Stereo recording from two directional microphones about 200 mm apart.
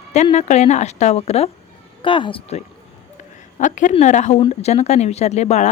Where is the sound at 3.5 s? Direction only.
40° left (ahead or behind).